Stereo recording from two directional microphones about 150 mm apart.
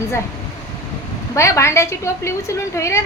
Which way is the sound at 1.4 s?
20° left (ahead or behind).